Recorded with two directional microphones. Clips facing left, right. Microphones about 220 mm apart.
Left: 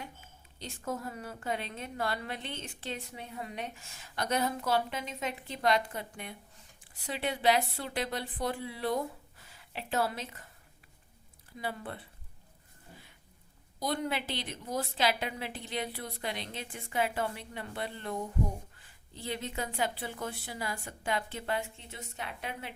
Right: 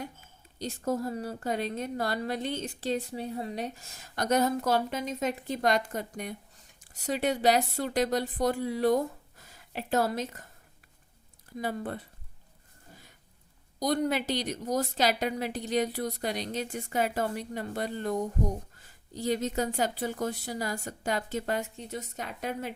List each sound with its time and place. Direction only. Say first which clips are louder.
0.6 s a woman's voice: right 7 dB; 35° right (ahead or behind)
11.5 s speech: right 6 dB; 45° right (ahead or behind)
12.9 s a sound: even; 40° right (ahead or behind)
13.7 s a woman's voice: right 6 dB; 40° right (ahead or behind)